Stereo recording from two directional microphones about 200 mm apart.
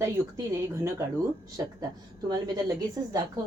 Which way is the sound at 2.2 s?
20° right (ahead or behind).